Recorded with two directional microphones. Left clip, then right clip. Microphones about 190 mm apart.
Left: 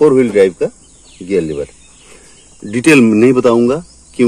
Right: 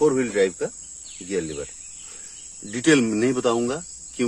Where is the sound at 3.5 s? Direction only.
30° left (ahead or behind).